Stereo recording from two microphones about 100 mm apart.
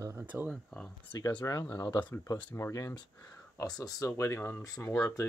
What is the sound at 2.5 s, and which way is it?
Speech, 30° left (ahead or behind).